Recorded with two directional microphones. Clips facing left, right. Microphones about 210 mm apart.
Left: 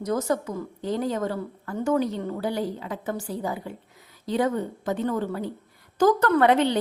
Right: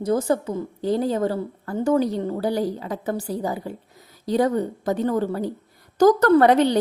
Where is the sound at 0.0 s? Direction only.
30° right (ahead or behind).